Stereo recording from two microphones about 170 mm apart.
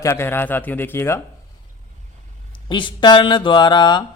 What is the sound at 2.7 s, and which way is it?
Speech, 30° left (ahead or behind).